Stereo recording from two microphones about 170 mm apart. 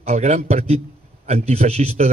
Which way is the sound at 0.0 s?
40° right (ahead or behind).